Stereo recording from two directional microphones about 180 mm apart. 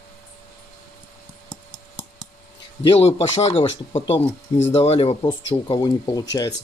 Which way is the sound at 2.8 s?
30° left (ahead or behind).